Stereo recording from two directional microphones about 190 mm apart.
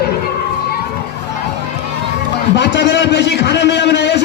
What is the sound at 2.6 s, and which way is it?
A man's voice, 65° left (ahead or behind).